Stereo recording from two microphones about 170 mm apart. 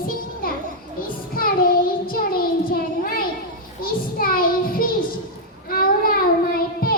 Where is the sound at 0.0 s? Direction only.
60° left (ahead or behind).